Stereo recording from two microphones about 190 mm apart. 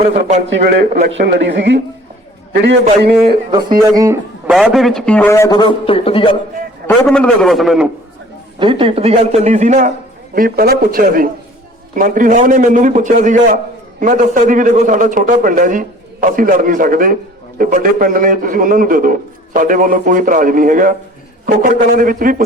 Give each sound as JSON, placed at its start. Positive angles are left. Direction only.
{"t": 0.1, "sound": "a man's voice", "side_deg": -35}
{"t": 1.1, "sound": "a man's voice", "side_deg": -70}
{"t": 3.5, "sound": "speech", "side_deg": -20}
{"t": 4.4, "sound": "a man's voice", "side_deg": 0}
{"t": 7.1, "sound": "a man's voice", "side_deg": 5}
{"t": 8.5, "sound": "a man's voice", "side_deg": -25}
{"t": 10.3, "sound": "a man's voice", "side_deg": -50}